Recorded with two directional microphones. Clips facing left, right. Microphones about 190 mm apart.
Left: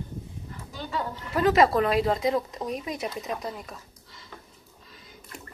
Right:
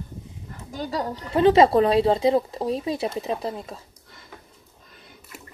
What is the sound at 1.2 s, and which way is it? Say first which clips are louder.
Speech: right 5 dB; 30° right (ahead or behind).